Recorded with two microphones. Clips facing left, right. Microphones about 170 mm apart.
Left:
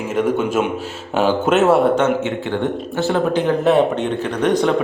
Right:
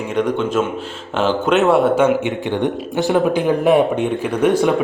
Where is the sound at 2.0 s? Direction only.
15° right (ahead or behind).